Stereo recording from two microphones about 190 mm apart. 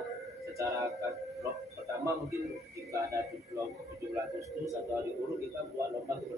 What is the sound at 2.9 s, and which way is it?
Speech, 15° right (ahead or behind).